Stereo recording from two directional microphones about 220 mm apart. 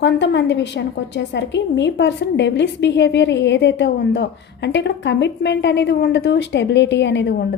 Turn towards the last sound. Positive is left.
turn(degrees=55)  # may be behind; listen again after turning